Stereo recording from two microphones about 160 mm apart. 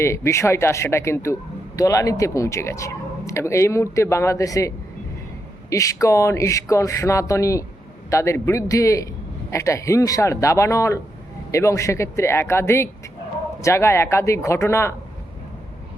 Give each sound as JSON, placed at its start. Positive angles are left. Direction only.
{"t": 0.0, "sound": "speech", "side_deg": 15}
{"t": 5.7, "sound": "speech", "side_deg": 20}